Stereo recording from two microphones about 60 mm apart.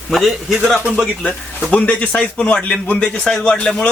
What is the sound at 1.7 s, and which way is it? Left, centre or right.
Speech, left.